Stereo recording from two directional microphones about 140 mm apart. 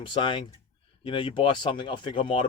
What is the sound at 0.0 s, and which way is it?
Speech, 35° left (ahead or behind).